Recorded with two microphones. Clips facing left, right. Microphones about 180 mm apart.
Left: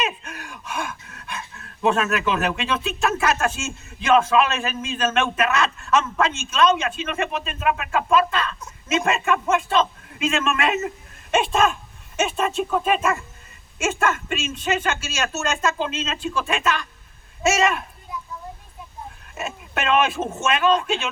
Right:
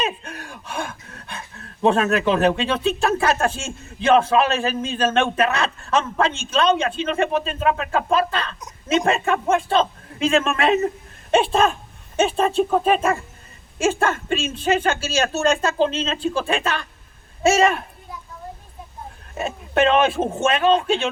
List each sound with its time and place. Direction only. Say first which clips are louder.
0.0 s a man's voice: right 2 dB; 30° right (ahead or behind)
19.3 s speech: right 6 dB; 30° right (ahead or behind)